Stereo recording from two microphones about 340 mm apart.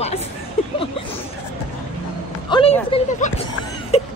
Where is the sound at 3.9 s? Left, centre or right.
Centre.